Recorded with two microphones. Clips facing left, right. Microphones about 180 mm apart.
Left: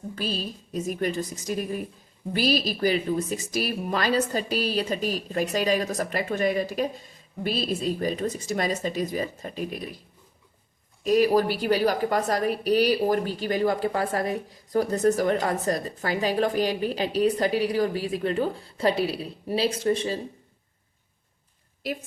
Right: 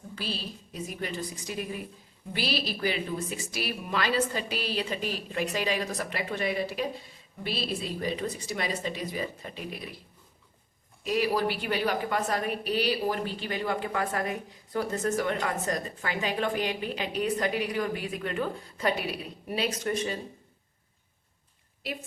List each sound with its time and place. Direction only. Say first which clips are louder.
0.2 s a woman's voice: left 5 dB; 45° left (ahead or behind)
11.0 s a woman's voice: left 7 dB; 45° left (ahead or behind)